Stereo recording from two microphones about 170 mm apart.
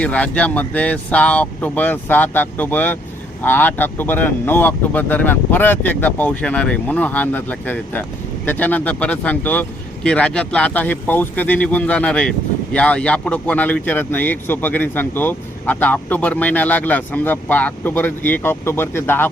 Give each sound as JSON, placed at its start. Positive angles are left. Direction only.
{"t": 0.0, "sound": "speech", "side_deg": 10}